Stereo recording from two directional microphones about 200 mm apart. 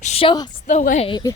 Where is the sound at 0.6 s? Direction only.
40° left (ahead or behind).